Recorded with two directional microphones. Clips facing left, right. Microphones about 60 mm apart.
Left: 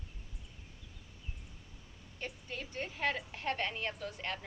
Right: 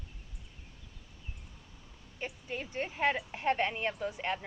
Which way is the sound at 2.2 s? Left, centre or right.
Centre.